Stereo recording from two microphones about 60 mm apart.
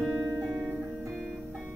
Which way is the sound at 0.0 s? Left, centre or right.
Centre.